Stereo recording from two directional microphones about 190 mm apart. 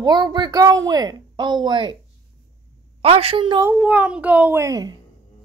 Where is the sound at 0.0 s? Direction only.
20° right (ahead or behind).